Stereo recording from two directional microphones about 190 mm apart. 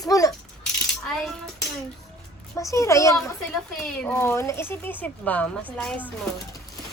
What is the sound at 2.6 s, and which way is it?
Speech, 15° left (ahead or behind).